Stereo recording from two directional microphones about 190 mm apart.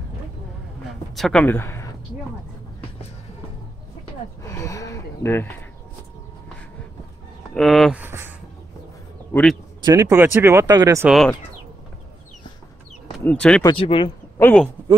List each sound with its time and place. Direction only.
1.1 s speech: 5° left (ahead or behind)
4.4 s a sound: 15° left (ahead or behind)
7.5 s speech: centre (ahead or behind)
8.0 s speech: 10° right (ahead or behind)
9.3 s speech: 5° left (ahead or behind)
9.8 s speech: 15° right (ahead or behind)
11.1 s speech: centre (ahead or behind)
13.2 s speech: 5° left (ahead or behind)
13.7 s speech: 25° left (ahead or behind)
14.4 s speech: 5° left (ahead or behind)